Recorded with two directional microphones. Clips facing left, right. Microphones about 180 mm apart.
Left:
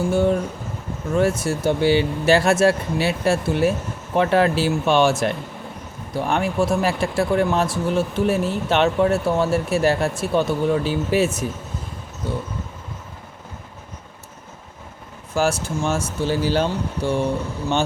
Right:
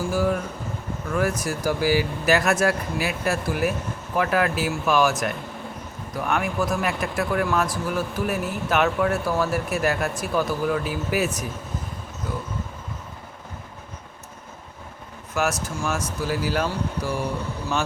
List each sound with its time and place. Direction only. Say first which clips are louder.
0.1 s speech: left 4 dB; 25° left (ahead or behind)
15.4 s speech: left 4 dB; 30° left (ahead or behind)